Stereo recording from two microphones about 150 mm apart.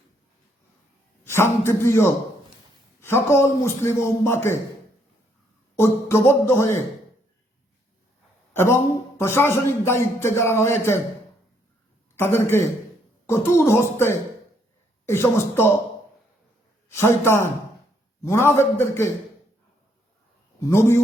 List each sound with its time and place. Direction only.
1.2 s a man's voice: 15° left (ahead or behind)
5.7 s speech: 15° left (ahead or behind)
9.1 s speech: 15° left (ahead or behind)
12.1 s speech: 15° left (ahead or behind)
16.9 s speech: 15° left (ahead or behind)
20.6 s speech: 20° left (ahead or behind)